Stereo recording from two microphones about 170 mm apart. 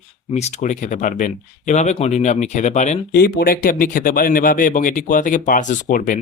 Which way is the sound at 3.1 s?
65° left (ahead or behind).